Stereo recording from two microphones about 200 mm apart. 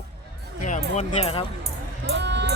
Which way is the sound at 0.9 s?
30° left (ahead or behind).